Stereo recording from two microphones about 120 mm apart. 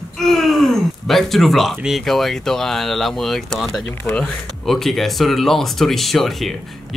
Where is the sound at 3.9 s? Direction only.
20° left (ahead or behind).